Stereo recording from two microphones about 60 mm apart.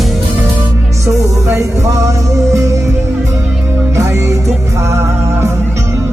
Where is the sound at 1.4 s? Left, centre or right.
Right.